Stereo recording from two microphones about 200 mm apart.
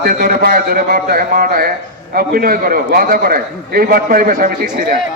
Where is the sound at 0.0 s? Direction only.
45° right (ahead or behind).